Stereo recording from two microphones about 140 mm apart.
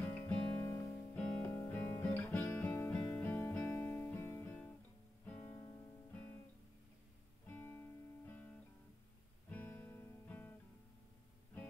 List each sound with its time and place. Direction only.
0.1 s music: 15° left (ahead or behind)
7.4 s music: 15° left (ahead or behind)